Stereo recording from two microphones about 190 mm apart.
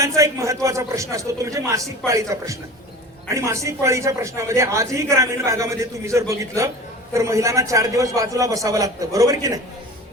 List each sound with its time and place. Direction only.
0.2 s a man's voice: 15° right (ahead or behind)